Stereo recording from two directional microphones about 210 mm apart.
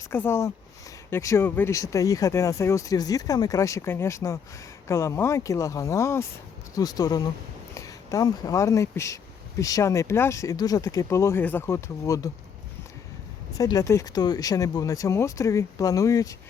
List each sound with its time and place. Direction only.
0.1 s speech: 10° left (ahead or behind)
13.6 s speech: 15° left (ahead or behind)